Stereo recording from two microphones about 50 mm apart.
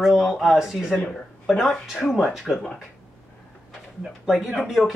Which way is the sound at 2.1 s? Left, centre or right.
Centre.